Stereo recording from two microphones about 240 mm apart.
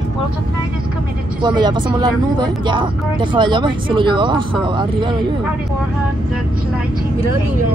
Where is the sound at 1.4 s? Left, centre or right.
Centre.